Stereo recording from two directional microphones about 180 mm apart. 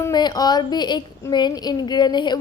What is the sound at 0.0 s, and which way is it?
Speech, 25° left (ahead or behind).